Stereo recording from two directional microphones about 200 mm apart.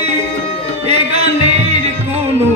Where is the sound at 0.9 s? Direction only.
30° right (ahead or behind).